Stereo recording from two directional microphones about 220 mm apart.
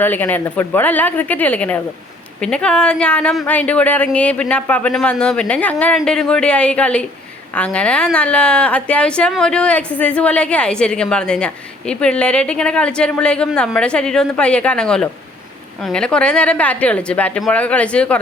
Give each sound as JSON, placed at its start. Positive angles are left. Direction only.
{"t": 0.0, "sound": "a woman's voice", "side_deg": 10}